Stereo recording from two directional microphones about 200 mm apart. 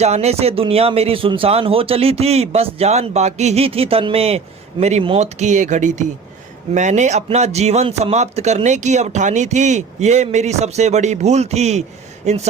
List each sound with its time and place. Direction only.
0.0 s a man's voice: 35° right (ahead or behind)